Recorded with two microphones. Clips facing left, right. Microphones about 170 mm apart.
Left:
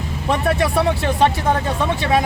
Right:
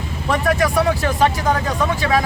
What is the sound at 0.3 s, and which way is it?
Speech, 25° left (ahead or behind).